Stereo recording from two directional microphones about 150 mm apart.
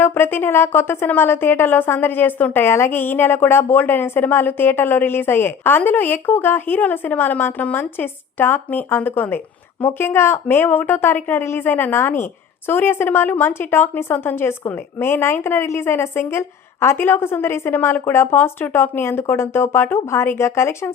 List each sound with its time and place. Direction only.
0.0 s a woman's voice: 15° left (ahead or behind)